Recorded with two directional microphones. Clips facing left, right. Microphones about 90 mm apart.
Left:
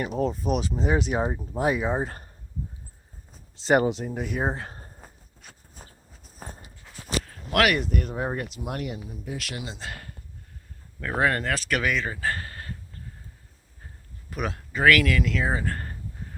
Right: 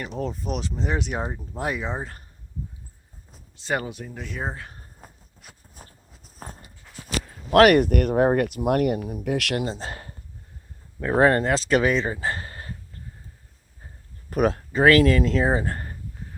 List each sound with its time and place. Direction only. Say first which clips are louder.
0.0 s speech: left 4 dB; 5° left (ahead or behind)
3.5 s speech: left 7 dB; 25° left (ahead or behind)
4.6 s a sound: left 3 dB; 35° left (ahead or behind)
4.9 s a sound: right 1 dB; centre (ahead or behind)
7.5 s speech: right 8 dB; 40° right (ahead or behind)
7.8 s speech: right 9 dB; 65° right (ahead or behind)
9.6 s speech: right 6 dB; 35° right (ahead or behind)
12.1 s a sound: right 1 dB; 20° right (ahead or behind)
14.3 s speech: right 9 dB; 45° right (ahead or behind); by 15.8 s 25° right (ahead or behind)